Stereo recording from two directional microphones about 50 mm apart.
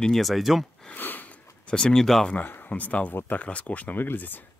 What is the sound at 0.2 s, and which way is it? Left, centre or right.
Speech, centre.